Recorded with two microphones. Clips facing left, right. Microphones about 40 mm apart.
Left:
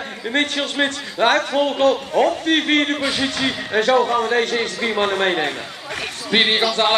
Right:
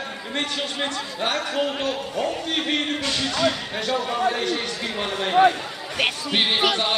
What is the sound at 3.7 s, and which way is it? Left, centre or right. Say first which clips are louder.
A man's voice: left 8 dB; left.